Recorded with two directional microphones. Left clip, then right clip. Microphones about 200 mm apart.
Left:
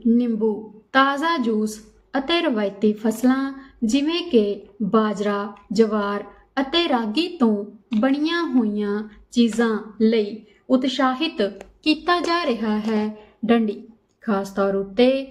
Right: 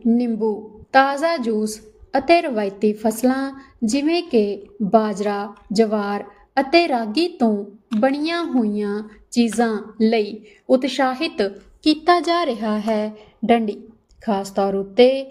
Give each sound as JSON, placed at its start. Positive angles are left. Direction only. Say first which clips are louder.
{"t": 0.1, "sound": "a woman's voice", "louder": "even", "side_deg": -20}